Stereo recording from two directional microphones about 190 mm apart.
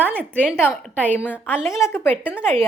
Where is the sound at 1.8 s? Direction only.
10° left (ahead or behind).